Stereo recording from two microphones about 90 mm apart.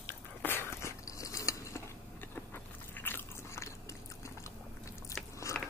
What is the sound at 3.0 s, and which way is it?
Biting, 25° left (ahead or behind).